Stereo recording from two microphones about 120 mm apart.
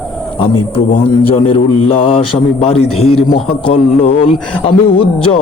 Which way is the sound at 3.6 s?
50° left (ahead or behind).